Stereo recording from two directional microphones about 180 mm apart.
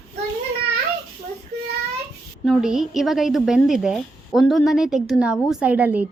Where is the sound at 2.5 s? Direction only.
Centre (ahead or behind).